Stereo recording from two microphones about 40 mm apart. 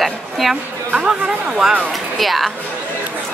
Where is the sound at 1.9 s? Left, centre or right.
Centre.